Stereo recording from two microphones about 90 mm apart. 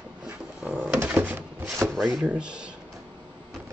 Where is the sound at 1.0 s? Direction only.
20° right (ahead or behind).